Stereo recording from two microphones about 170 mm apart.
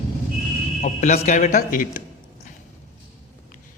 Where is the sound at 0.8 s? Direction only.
45° left (ahead or behind).